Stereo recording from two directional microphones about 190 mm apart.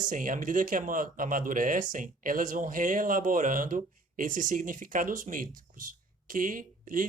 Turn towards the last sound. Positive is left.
turn(degrees=-45)  # may be behind; listen again after turning